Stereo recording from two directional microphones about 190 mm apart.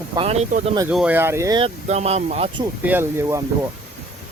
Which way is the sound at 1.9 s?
35° right (ahead or behind).